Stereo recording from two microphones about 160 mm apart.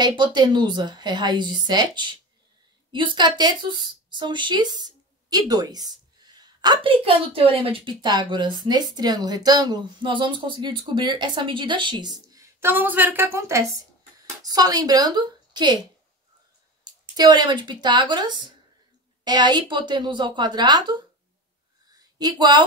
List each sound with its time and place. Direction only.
0.0 s speech: 30° right (ahead or behind)
17.2 s speech: 25° right (ahead or behind)
22.2 s speech: 25° right (ahead or behind)